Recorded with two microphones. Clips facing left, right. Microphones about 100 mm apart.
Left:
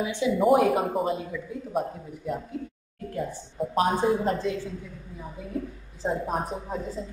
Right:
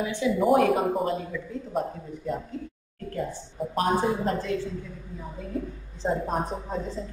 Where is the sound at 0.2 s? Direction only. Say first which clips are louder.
Left 1 dB; 20° left (ahead or behind).